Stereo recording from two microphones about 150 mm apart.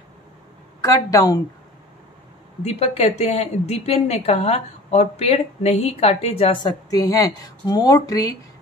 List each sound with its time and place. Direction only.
0.7 s a woman's voice: 25° left (ahead or behind)
2.6 s a woman's voice: 45° left (ahead or behind); by 8.4 s 25° left (ahead or behind)